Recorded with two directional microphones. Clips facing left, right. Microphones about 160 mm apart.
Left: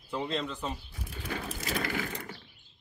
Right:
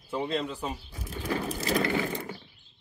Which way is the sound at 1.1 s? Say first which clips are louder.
Right 7 dB; 40° right (ahead or behind).